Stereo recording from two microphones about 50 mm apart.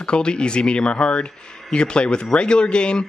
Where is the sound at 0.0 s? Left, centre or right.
Centre.